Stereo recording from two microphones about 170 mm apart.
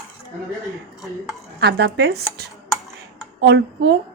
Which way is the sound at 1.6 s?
75° right (ahead or behind).